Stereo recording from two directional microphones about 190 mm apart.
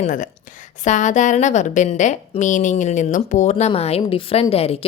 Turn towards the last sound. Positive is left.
turn(degrees=30)  # may be behind; listen again after turning